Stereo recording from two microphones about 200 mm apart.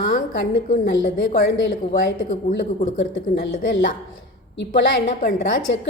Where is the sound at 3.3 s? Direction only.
60° left (ahead or behind).